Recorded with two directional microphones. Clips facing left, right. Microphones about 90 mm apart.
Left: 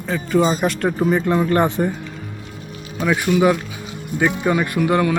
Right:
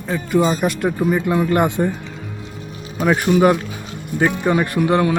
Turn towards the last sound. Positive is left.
turn(degrees=-30)  # may be behind; listen again after turning